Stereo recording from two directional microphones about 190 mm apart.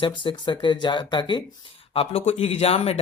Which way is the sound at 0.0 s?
25° left (ahead or behind).